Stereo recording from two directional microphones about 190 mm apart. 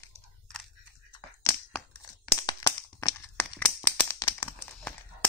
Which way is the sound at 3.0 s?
15° left (ahead or behind).